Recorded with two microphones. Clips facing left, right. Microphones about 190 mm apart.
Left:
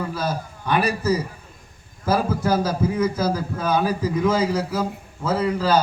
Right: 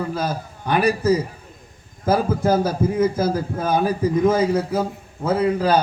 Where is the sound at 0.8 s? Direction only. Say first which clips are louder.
Right 4 dB; 30° right (ahead or behind).